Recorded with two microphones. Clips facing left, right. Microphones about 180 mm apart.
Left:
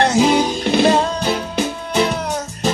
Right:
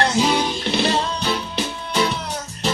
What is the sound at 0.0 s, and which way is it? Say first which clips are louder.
Music: left 5 dB; 50° left (ahead or behind).